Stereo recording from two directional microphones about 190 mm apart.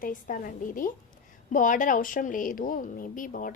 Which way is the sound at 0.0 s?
45° left (ahead or behind).